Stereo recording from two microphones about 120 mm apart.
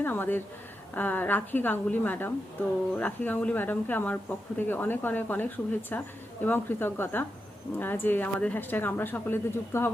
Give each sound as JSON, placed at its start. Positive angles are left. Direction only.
{"t": 0.0, "sound": "speech", "side_deg": 15}